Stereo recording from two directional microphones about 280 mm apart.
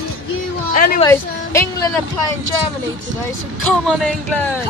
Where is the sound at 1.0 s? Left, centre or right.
Centre.